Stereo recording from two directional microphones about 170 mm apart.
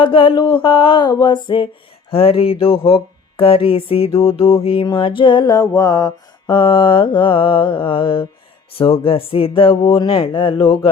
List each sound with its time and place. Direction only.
0.0 s mantra: 30° left (ahead or behind)
2.0 s speech: 35° left (ahead or behind)
4.4 s mantra: 35° left (ahead or behind)
8.7 s speech: 35° left (ahead or behind)